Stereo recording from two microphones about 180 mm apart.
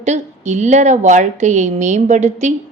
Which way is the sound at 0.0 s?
40° right (ahead or behind).